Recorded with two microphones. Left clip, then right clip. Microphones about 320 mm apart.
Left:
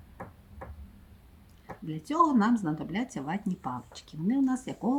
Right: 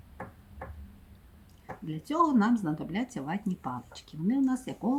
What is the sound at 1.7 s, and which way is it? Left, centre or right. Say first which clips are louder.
Speech: even; centre.